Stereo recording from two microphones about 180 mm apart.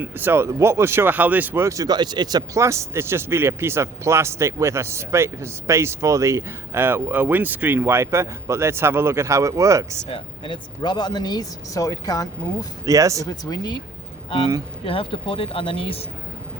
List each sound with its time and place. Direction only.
0.0 s speech: 10° right (ahead or behind)
10.1 s speech: 30° left (ahead or behind)
12.8 s speech: 20° right (ahead or behind)
13.2 s speech: 20° left (ahead or behind)